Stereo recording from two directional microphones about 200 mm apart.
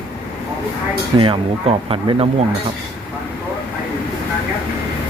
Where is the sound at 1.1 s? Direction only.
25° right (ahead or behind).